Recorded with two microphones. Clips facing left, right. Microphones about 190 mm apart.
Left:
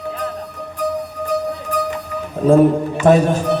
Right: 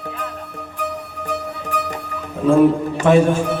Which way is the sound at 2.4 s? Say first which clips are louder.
Left 1 dB; 40° left (ahead or behind).